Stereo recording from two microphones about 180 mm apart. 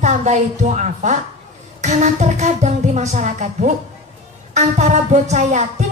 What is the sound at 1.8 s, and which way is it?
A woman's voice, 40° right (ahead or behind).